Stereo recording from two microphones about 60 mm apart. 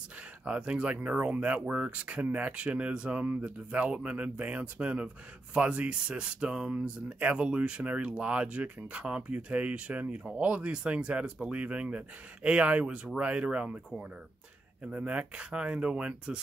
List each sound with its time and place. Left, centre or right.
0.5 s speech: centre